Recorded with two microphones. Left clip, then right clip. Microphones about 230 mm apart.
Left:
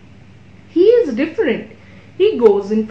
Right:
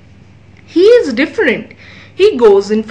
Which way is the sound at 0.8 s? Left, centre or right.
Right.